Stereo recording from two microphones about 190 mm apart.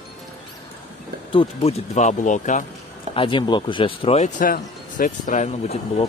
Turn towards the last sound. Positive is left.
turn(degrees=35)  # may be behind; listen again after turning